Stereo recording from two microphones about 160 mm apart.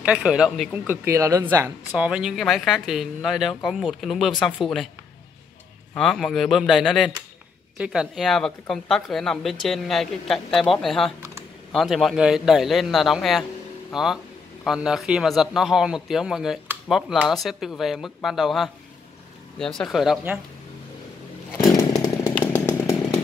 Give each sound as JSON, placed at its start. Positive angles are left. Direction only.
{"t": 0.0, "sound": "speech", "side_deg": -5}
{"t": 1.0, "sound": "speech", "side_deg": -15}
{"t": 5.9, "sound": "speech", "side_deg": 5}
{"t": 21.7, "sound": "chainsaw", "side_deg": 25}